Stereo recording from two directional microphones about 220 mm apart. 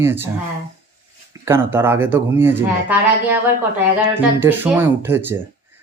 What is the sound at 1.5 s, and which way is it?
Speech, 10° right (ahead or behind).